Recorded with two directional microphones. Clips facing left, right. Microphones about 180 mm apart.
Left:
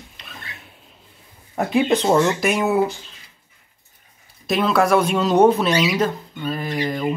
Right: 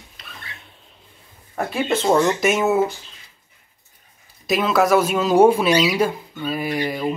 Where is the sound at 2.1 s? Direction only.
Centre (ahead or behind).